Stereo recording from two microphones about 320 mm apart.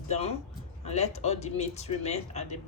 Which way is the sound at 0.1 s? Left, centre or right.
Centre.